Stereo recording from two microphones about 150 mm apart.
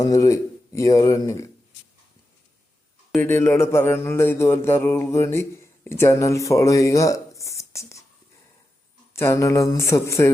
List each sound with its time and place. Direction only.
0.0 s speech: 20° left (ahead or behind)
3.2 s speech: 15° left (ahead or behind)
9.1 s speech: 20° left (ahead or behind)